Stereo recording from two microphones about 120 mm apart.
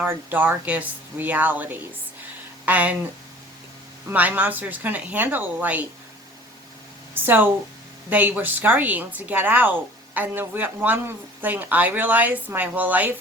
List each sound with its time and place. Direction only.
0.0 s a woman's voice: 15° right (ahead or behind)
4.1 s a woman's voice: 15° right (ahead or behind)
7.1 s a woman's voice: 15° right (ahead or behind)